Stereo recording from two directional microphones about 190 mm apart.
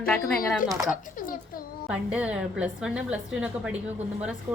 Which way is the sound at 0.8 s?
45° left (ahead or behind).